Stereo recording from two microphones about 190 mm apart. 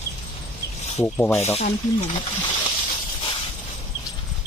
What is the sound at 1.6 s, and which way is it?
Speech, 35° left (ahead or behind).